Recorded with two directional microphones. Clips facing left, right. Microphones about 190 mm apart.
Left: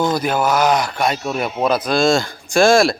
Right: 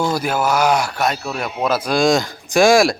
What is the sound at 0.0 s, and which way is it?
Speech, 5° right (ahead or behind).